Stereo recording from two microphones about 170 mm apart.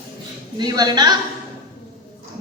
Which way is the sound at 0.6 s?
25° right (ahead or behind).